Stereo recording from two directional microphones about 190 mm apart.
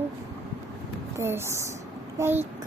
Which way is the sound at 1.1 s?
15° right (ahead or behind).